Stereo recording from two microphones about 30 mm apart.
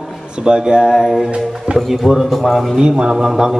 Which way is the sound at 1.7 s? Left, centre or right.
Right.